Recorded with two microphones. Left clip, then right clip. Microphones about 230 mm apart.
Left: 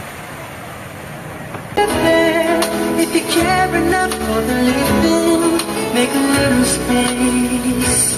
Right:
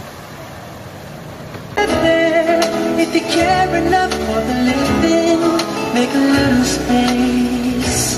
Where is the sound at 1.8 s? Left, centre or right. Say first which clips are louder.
Even; right.